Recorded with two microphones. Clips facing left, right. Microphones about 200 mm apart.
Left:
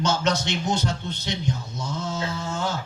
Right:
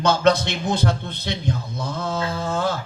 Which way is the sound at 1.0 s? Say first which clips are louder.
Right 1 dB; 55° right (ahead or behind).